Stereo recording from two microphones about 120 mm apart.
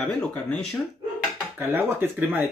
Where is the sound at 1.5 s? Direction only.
15° right (ahead or behind).